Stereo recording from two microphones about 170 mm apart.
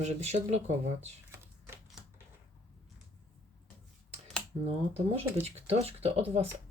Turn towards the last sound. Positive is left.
turn(degrees=-35)  # may be behind; listen again after turning